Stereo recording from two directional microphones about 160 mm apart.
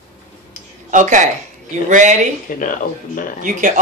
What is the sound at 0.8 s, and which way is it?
Speech, 50° right (ahead or behind).